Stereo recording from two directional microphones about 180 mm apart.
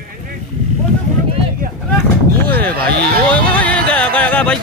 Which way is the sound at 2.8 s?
60° right (ahead or behind).